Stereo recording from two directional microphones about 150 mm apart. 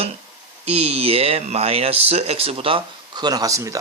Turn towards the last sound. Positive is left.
turn(degrees=-20)  # may be behind; listen again after turning